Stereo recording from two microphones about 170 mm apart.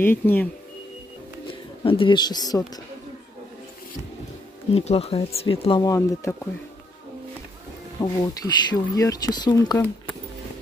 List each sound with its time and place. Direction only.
0.0 s speech: 10° left (ahead or behind)
1.9 s speech: 30° left (ahead or behind)
4.7 s speech: 35° left (ahead or behind); by 6.5 s 15° left (ahead or behind)
8.0 s speech: 25° left (ahead or behind)